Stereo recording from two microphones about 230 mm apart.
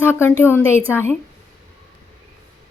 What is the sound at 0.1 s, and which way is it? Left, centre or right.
Speech, centre.